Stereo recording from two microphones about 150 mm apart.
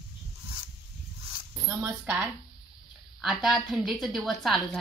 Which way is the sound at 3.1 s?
Centre (ahead or behind).